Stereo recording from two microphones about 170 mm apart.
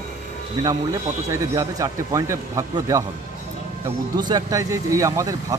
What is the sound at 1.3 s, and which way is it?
A man's voice, 20° right (ahead or behind).